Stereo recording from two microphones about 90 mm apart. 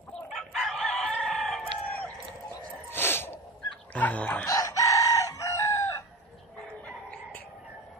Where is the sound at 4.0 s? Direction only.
15° left (ahead or behind).